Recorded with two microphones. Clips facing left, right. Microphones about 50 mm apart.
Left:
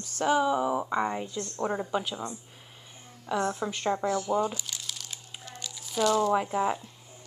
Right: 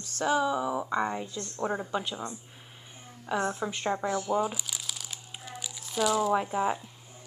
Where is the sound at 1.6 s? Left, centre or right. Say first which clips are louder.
Left 1 dB; centre.